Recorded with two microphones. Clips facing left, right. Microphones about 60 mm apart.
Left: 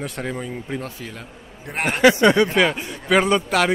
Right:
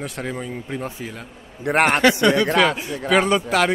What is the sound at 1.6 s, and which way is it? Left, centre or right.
Speech, right.